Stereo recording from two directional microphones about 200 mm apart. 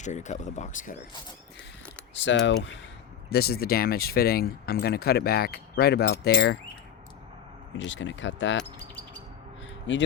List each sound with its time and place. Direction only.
0.0 s speech: 35° left (ahead or behind)
2.1 s mechanisms: 65° left (ahead or behind)
3.2 s speech: 50° left (ahead or behind)
7.8 s speech: 65° left (ahead or behind)
9.9 s mechanisms: 65° left (ahead or behind)